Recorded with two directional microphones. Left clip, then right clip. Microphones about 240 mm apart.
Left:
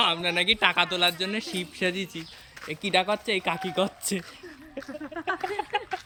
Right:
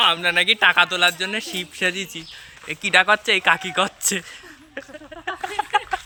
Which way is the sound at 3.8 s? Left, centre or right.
Centre.